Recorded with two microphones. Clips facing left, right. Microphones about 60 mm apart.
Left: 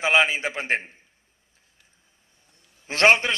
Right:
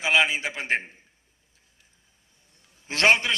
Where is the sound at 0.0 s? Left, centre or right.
Left.